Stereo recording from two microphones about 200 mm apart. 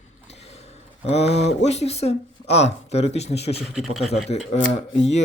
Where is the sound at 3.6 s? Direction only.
Centre (ahead or behind).